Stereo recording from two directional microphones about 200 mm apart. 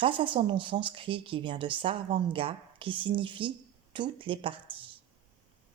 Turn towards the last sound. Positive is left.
turn(degrees=-25)  # may be behind; listen again after turning